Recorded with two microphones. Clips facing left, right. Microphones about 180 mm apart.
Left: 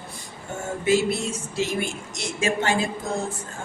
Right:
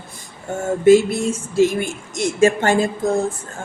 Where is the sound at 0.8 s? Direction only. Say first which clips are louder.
Right 9 dB; 50° right (ahead or behind).